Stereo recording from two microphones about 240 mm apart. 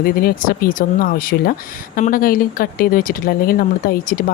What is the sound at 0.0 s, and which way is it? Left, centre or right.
Speech, left.